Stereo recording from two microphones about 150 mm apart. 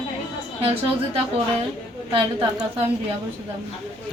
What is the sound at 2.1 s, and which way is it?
Speech, 35° right (ahead or behind).